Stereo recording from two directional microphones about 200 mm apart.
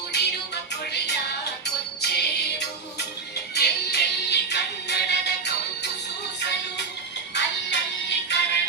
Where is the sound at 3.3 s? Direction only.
55° left (ahead or behind).